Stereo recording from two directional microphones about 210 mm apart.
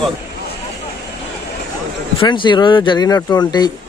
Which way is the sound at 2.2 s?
20° left (ahead or behind).